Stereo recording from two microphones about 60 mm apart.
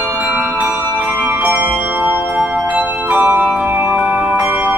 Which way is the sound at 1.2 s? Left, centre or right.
Right.